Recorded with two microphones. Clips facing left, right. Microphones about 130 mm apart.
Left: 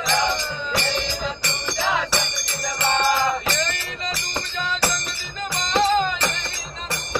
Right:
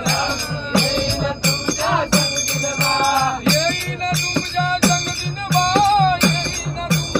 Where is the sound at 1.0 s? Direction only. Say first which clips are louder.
Right 7 dB; 65° right (ahead or behind).